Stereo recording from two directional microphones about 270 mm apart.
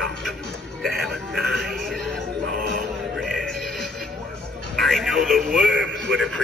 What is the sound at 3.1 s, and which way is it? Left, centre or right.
Music, centre.